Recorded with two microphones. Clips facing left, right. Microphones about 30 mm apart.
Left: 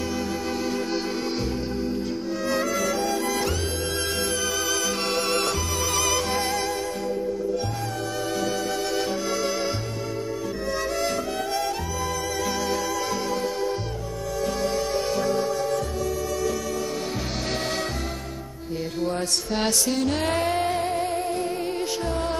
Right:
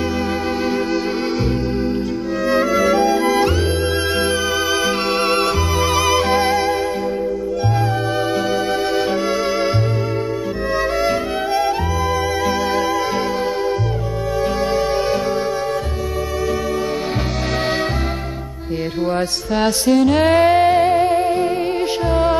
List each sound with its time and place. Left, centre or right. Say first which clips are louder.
2.4 s music: right 10 dB; right
4.8 s music: right 8 dB; right
11.0 s music: right 7 dB; right
14.7 s music: right 8 dB; right
19.5 s music: right 10 dB; centre
20.2 s music: right 11 dB; right